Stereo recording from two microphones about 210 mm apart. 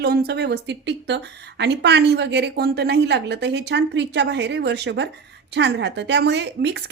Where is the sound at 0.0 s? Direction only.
50° right (ahead or behind).